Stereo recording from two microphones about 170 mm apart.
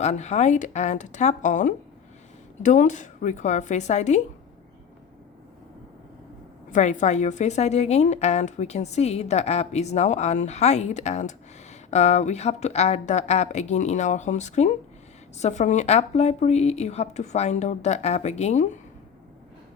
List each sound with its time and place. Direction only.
0.0 s a woman's voice: 40° left (ahead or behind)
6.7 s a woman's voice: 45° left (ahead or behind)